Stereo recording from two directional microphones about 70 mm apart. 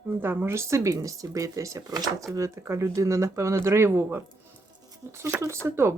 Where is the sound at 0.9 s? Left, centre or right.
Right.